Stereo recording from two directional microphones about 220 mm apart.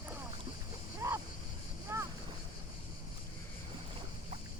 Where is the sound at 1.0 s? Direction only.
15° right (ahead or behind).